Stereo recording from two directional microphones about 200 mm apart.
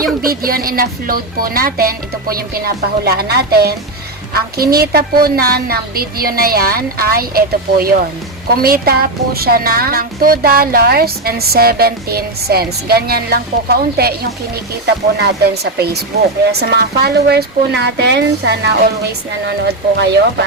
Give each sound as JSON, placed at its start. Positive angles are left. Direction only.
{"t": 0.2, "sound": "speech", "side_deg": -45}